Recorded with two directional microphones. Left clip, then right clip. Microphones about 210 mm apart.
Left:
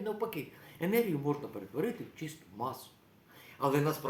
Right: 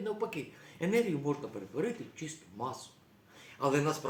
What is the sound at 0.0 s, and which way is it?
A man's voice, 10° left (ahead or behind).